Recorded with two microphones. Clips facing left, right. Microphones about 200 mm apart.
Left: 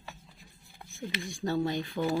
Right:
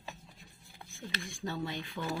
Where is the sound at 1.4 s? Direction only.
40° left (ahead or behind).